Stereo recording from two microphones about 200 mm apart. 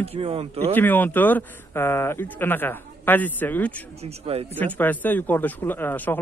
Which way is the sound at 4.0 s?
30° right (ahead or behind).